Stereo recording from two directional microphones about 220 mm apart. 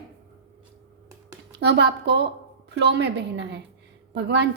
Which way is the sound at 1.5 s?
50° right (ahead or behind).